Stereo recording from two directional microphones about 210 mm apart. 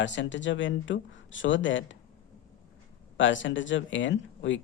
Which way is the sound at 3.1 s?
65° left (ahead or behind).